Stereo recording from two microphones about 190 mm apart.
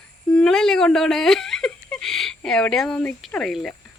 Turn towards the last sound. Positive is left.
turn(degrees=0)  # may be behind; listen again after turning